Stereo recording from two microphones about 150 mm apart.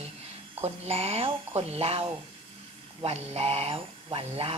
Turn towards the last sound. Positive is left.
turn(degrees=-40)  # may be behind; listen again after turning